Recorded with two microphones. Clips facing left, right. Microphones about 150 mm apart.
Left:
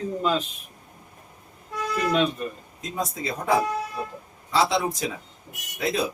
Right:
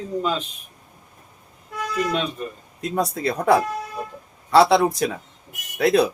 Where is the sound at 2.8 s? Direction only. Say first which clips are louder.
Right 7 dB; 65° right (ahead or behind).